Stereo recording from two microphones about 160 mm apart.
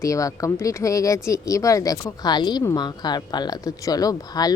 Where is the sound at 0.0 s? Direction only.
20° left (ahead or behind).